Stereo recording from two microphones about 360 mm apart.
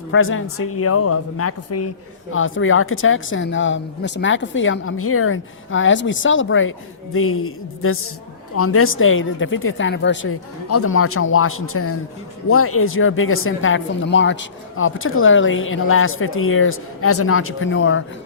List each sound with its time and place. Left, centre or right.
0.1 s speech: left